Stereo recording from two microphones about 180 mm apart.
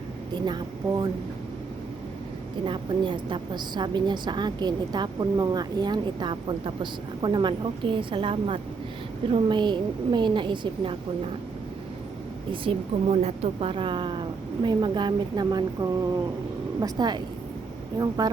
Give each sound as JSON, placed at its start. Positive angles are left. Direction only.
{"t": 0.3, "sound": "a woman's voice", "side_deg": -25}
{"t": 2.6, "sound": "a woman's voice", "side_deg": -25}
{"t": 12.5, "sound": "a woman's voice", "side_deg": -30}